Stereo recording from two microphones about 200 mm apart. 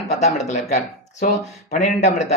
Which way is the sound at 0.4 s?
35° left (ahead or behind).